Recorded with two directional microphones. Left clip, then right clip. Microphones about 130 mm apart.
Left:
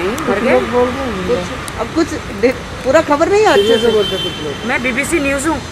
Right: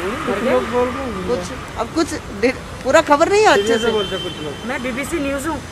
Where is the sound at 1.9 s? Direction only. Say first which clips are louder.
Left 5 dB; 45° right (ahead or behind).